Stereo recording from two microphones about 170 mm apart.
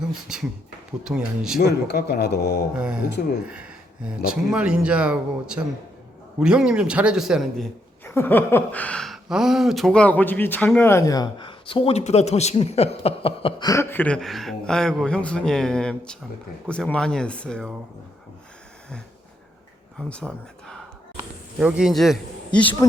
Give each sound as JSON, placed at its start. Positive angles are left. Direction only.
{"t": 0.1, "sound": "a man's voice", "side_deg": -5}
{"t": 1.5, "sound": "a man's voice", "side_deg": 70}
{"t": 2.7, "sound": "a man's voice", "side_deg": -5}
{"t": 3.4, "sound": "a sound", "side_deg": -5}
{"t": 4.3, "sound": "a man's voice", "side_deg": -5}
{"t": 8.0, "sound": "speech", "side_deg": 10}
{"t": 13.7, "sound": "a man's voice", "side_deg": 15}
{"t": 20.0, "sound": "a man's voice", "side_deg": 5}